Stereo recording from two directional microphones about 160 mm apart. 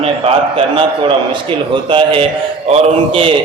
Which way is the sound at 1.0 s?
30° right (ahead or behind).